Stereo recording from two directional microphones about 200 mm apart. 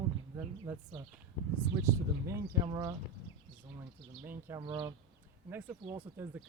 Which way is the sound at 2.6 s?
20° right (ahead or behind).